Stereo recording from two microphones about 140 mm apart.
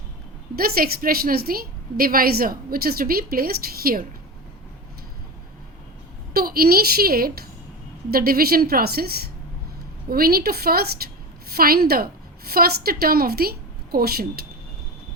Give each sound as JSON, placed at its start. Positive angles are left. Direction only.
{"t": 0.5, "sound": "a woman's voice", "side_deg": -90}
{"t": 6.3, "sound": "a woman's voice", "side_deg": -90}